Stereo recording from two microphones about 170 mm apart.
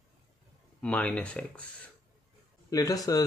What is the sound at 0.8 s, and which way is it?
Speech, 5° left (ahead or behind).